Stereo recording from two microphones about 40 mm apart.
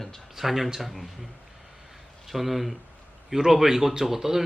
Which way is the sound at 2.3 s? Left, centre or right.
Centre.